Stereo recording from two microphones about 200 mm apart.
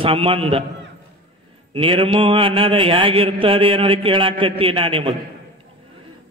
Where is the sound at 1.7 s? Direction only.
25° right (ahead or behind).